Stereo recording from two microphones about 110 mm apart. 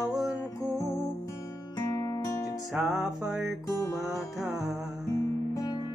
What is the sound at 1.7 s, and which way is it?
Music, 30° left (ahead or behind).